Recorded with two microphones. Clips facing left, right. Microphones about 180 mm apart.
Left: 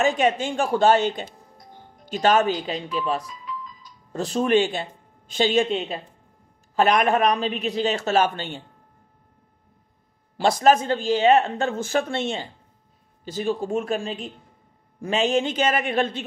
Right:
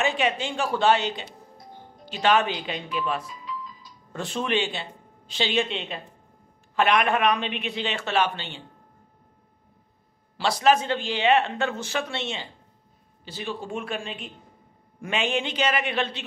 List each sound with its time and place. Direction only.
0.0 s a man's voice: 45° left (ahead or behind)
10.3 s a man's voice: 45° left (ahead or behind)